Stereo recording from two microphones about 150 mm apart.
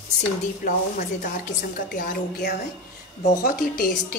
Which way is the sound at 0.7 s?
60° left (ahead or behind).